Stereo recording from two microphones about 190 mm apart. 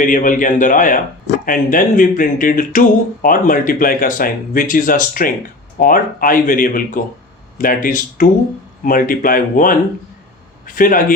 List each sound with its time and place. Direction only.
0.0 s speech: 45° left (ahead or behind)